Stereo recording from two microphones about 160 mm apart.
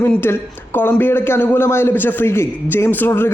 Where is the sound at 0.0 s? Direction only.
15° left (ahead or behind).